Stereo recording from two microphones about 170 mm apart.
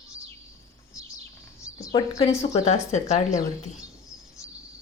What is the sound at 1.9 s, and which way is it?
Speech, 25° left (ahead or behind).